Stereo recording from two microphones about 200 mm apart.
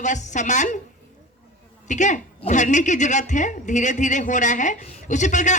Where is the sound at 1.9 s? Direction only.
35° left (ahead or behind).